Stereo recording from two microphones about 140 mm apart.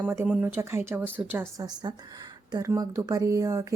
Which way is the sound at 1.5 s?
30° right (ahead or behind).